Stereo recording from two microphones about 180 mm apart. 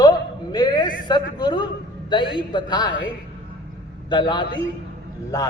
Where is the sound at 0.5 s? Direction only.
20° left (ahead or behind).